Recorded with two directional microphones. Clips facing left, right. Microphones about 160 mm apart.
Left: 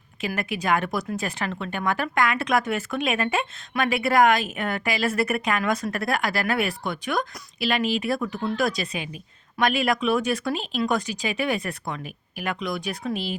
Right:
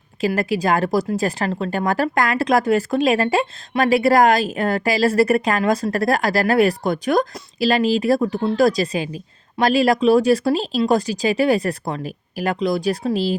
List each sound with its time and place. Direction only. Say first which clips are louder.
0.2 s speech: right 9 dB; 35° right (ahead or behind)